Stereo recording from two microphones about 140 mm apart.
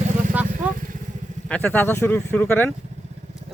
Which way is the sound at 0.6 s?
10° right (ahead or behind).